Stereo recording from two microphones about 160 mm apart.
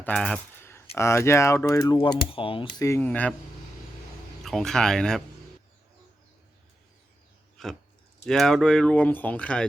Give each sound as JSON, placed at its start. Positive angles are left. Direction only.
{"t": 0.0, "sound": "a sound", "side_deg": 5}
{"t": 0.9, "sound": "speech", "side_deg": 15}
{"t": 2.3, "sound": "speech", "side_deg": 35}
{"t": 2.7, "sound": "speech", "side_deg": 20}
{"t": 4.4, "sound": "speech", "side_deg": 0}
{"t": 7.6, "sound": "chewing", "side_deg": 0}
{"t": 8.2, "sound": "speech", "side_deg": 0}